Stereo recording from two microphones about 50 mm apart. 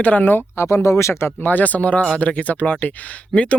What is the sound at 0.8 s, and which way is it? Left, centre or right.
Speech, left.